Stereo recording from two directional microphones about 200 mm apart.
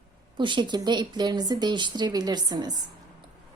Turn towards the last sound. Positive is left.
turn(degrees=-20)  # may be behind; listen again after turning